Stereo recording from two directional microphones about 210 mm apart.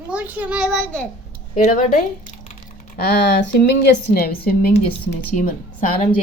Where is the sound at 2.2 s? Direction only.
40° left (ahead or behind).